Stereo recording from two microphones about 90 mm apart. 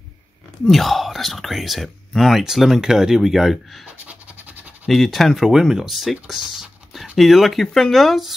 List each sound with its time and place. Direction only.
0.7 s speech: centre (ahead or behind)
4.0 s scratch: 15° right (ahead or behind)
4.8 s speech: centre (ahead or behind)